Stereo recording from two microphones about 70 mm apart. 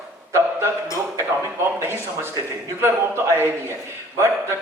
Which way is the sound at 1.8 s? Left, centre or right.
Right.